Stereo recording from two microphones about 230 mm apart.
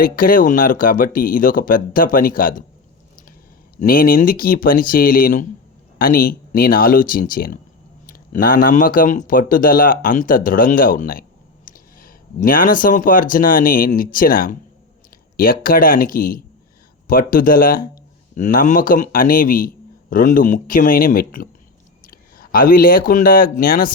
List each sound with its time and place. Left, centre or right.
0.0 s speech: left
3.8 s speech: left